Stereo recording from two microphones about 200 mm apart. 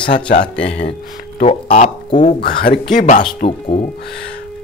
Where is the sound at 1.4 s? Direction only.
40° left (ahead or behind).